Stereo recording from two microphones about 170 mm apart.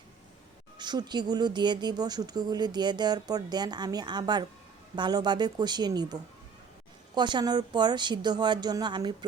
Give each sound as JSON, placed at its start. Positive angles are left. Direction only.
{"t": 0.8, "sound": "speech", "side_deg": -25}